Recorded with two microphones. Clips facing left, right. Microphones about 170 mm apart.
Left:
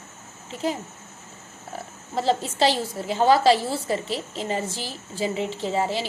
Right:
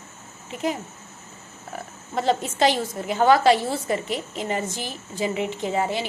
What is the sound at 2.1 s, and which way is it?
A woman's voice, 30° left (ahead or behind).